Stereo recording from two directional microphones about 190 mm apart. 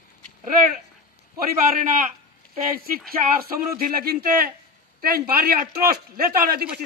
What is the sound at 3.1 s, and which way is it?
Speech, 50° right (ahead or behind).